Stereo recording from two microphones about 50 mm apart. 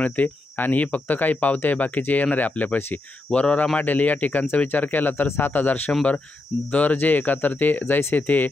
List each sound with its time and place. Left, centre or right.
0.0 s a man's voice: left